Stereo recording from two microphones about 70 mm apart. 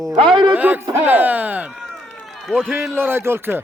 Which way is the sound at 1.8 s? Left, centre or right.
Centre.